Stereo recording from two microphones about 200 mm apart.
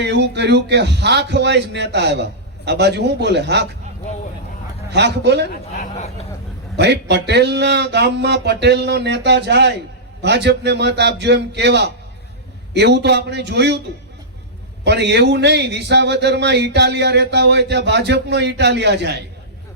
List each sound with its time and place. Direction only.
0.0 s speech: 60° right (ahead or behind)
4.9 s speech: 55° right (ahead or behind)
6.7 s speech: 60° right (ahead or behind)
14.8 s speech: 60° right (ahead or behind)